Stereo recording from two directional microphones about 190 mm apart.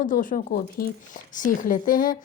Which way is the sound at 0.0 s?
45° left (ahead or behind).